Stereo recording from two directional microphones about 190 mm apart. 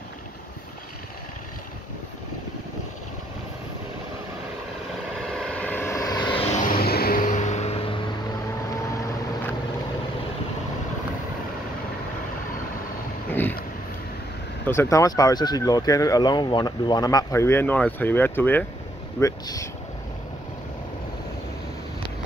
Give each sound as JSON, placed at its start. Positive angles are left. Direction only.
{"t": 5.3, "sound": "vehicle", "side_deg": 5}
{"t": 6.4, "sound": "vehicle", "side_deg": 40}
{"t": 6.7, "sound": "vehicle", "side_deg": 55}
{"t": 13.3, "sound": "vehicle", "side_deg": 10}
{"t": 14.7, "sound": "speech", "side_deg": 15}